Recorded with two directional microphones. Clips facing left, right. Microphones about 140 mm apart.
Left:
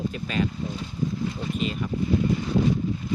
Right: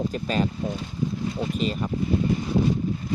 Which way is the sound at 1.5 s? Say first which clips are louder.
Right 1 dB; 40° right (ahead or behind).